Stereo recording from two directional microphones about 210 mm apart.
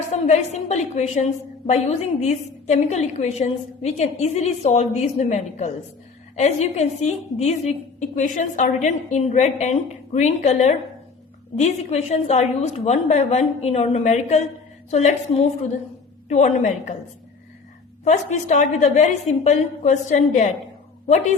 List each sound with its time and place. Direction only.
0.1 s a woman's voice: 30° left (ahead or behind)
18.0 s a woman's voice: 35° left (ahead or behind)